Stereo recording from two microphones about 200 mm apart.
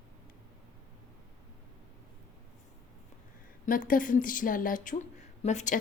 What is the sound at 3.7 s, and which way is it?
A woman's voice, 45° left (ahead or behind).